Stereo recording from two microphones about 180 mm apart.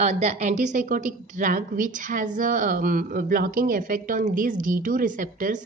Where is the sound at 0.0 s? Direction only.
40° right (ahead or behind).